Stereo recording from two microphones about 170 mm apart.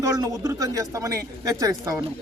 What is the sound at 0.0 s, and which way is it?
A man's voice, 20° right (ahead or behind).